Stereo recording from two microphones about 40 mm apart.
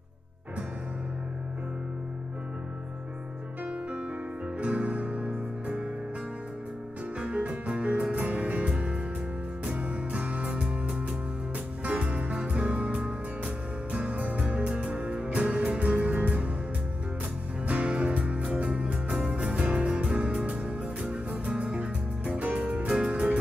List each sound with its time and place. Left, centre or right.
4.6 s music: right
7.2 s music: right
8.6 s music: right
11.8 s music: right
17.6 s music: right
22.8 s music: right